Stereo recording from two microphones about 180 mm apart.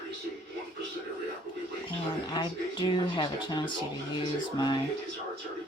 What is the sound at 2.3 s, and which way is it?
Speech, 25° left (ahead or behind).